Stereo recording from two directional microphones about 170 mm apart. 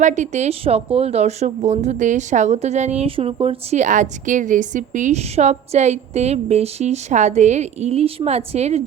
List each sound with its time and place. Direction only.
0.0 s a woman's voice: 45° right (ahead or behind)